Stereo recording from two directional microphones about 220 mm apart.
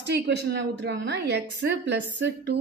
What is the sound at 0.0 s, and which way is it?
A woman's voice, 50° right (ahead or behind).